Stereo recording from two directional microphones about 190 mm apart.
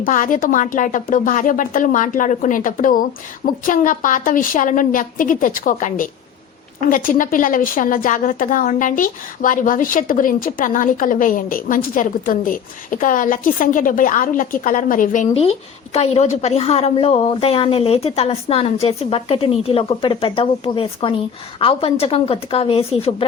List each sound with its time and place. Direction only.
0.0 s a woman's voice: 45° left (ahead or behind)
15.3 s a woman's voice: 30° left (ahead or behind)